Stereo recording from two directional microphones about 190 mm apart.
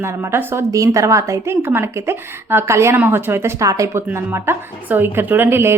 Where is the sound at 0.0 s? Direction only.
15° right (ahead or behind).